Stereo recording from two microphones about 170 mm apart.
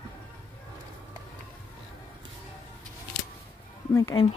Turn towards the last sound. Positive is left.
turn(degrees=20)  # may be behind; listen again after turning